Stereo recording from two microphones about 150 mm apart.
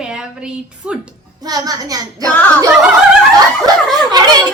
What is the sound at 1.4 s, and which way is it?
Speech, 25° right (ahead or behind).